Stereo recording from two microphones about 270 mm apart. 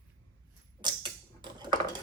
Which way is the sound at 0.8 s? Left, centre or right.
Centre.